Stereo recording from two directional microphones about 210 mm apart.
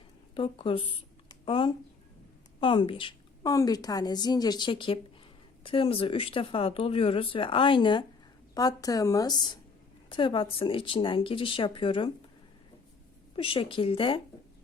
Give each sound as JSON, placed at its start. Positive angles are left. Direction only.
{"t": 0.3, "sound": "a woman's voice", "side_deg": 25}
{"t": 13.3, "sound": "a woman's voice", "side_deg": 25}